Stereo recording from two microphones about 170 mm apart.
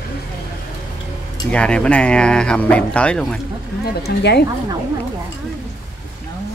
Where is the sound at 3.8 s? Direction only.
75° left (ahead or behind).